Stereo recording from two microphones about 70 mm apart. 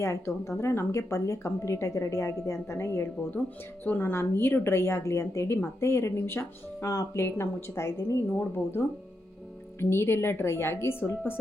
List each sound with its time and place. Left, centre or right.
0.0 s a woman's voice: left
6.8 s a woman's voice: left
9.8 s a woman's voice: left